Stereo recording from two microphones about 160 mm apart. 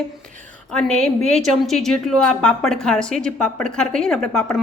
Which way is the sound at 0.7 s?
5° left (ahead or behind).